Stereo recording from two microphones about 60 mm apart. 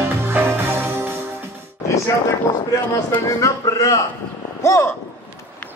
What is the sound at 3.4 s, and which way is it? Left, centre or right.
Speech, left.